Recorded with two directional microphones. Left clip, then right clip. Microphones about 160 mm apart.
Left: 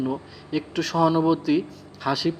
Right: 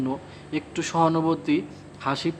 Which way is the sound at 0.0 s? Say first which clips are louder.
Left 1 dB; 10° left (ahead or behind).